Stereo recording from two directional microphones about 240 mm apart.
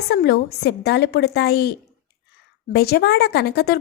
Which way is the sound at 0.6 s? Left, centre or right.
Left.